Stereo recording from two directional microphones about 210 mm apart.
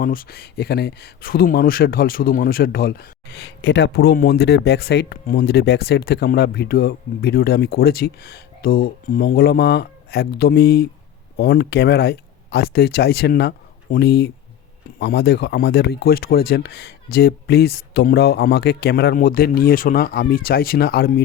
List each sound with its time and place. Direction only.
0.0 s speech: 40° left (ahead or behind)